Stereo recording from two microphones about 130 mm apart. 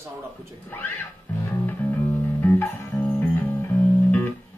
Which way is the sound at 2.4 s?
15° left (ahead or behind).